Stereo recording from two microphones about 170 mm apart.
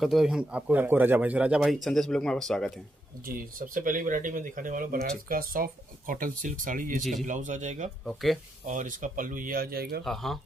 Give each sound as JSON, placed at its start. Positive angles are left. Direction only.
{"t": 0.0, "sound": "a man's voice", "side_deg": 0}
{"t": 3.3, "sound": "speech", "side_deg": -55}
{"t": 8.0, "sound": "a man's voice", "side_deg": 0}
{"t": 8.6, "sound": "speech", "side_deg": -50}
{"t": 10.0, "sound": "a man's voice", "side_deg": 0}